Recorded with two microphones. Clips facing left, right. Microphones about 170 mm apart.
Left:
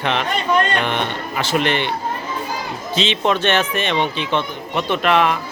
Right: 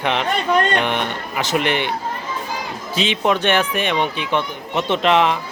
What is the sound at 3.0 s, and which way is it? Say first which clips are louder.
Speech: even; 10° right (ahead or behind).